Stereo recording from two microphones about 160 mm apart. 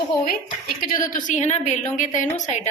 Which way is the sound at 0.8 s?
60° left (ahead or behind).